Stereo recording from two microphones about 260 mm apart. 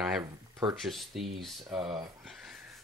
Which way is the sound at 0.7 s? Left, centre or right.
Centre.